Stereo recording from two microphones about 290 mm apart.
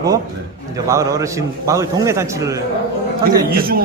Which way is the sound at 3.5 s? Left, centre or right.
Right.